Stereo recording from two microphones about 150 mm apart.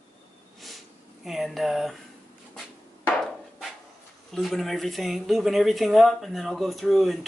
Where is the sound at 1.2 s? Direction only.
Centre (ahead or behind).